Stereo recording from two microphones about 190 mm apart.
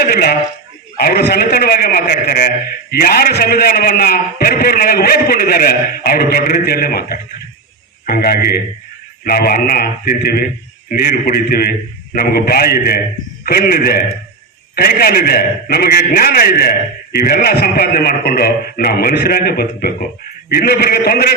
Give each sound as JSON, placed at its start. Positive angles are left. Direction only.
{"t": 0.0, "sound": "a man's voice", "side_deg": 55}